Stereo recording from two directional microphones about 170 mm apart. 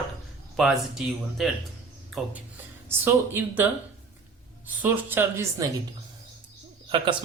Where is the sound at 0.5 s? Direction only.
Centre (ahead or behind).